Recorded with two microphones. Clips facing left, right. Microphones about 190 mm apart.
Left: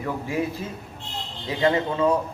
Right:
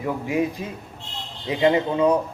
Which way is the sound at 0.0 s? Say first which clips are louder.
Right 3 dB; 15° right (ahead or behind).